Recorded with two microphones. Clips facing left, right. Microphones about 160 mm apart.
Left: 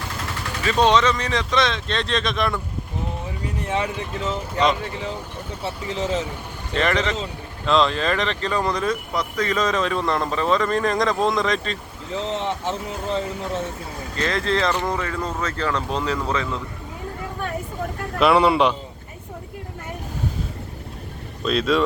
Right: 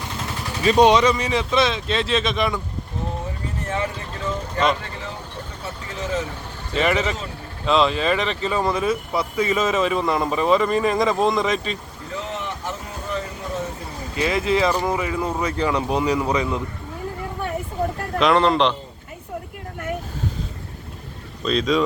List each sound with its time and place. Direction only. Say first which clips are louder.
0.6 s speech: right 3 dB; 15° right (ahead or behind)
3.7 s speech: left 2 dB; 10° left (ahead or behind)
5.9 s speech: left 2 dB; 20° left (ahead or behind)
6.7 s speech: right 1 dB; 5° right (ahead or behind)
12.4 s speech: left 4 dB; 25° left (ahead or behind)
14.2 s speech: right 2 dB; 10° right (ahead or behind)
18.2 s speech: left 1 dB; 5° left (ahead or behind)
21.4 s speech: even; 5° left (ahead or behind)